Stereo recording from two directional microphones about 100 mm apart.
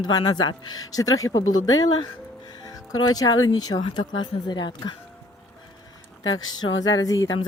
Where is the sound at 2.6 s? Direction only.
40° left (ahead or behind).